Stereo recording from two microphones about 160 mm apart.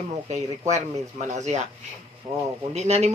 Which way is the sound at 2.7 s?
45° right (ahead or behind).